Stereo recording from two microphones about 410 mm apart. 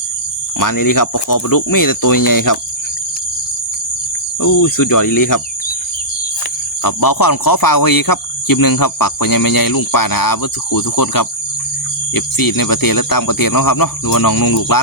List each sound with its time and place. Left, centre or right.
0.6 s speech: left
4.4 s speech: left
6.8 s speech: left